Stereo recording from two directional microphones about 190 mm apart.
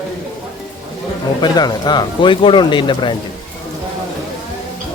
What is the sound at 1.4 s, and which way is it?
Speech, 20° left (ahead or behind).